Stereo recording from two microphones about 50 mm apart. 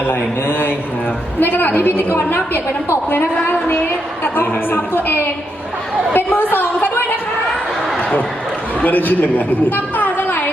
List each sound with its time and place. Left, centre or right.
0.1 s a man's voice: left
4.2 s a woman's voice: left
8.8 s a woman's voice: left